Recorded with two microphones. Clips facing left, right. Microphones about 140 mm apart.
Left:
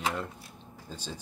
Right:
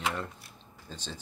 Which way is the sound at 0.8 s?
10° left (ahead or behind).